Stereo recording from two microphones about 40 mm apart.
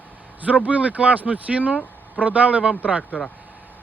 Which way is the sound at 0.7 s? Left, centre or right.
Right.